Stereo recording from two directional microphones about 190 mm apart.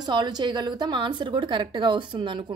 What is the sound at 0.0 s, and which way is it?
A woman's voice, 20° right (ahead or behind).